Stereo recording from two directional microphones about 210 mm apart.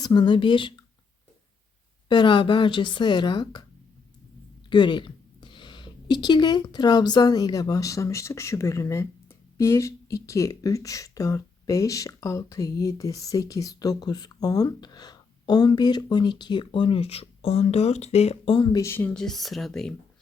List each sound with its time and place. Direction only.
0.0 s speech: 20° left (ahead or behind)
2.0 s speech: 20° left (ahead or behind)
4.7 s a woman's voice: 20° left (ahead or behind); by 19.9 s centre (ahead or behind)